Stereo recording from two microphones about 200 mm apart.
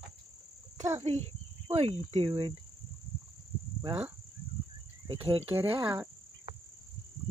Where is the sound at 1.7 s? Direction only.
30° right (ahead or behind).